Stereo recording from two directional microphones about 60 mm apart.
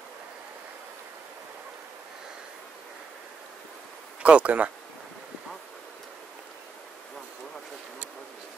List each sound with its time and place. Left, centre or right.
4.2 s speech: right